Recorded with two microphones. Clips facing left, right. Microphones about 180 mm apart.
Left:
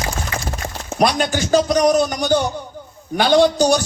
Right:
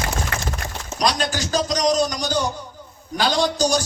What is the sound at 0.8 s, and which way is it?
A man's voice, 55° left (ahead or behind).